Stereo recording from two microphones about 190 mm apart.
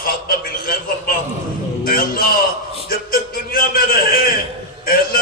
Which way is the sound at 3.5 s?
50° left (ahead or behind).